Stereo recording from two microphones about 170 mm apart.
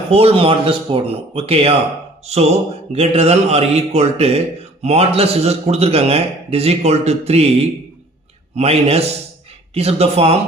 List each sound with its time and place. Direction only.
0.1 s a man's voice: 35° right (ahead or behind)
8.5 s a man's voice: 35° right (ahead or behind)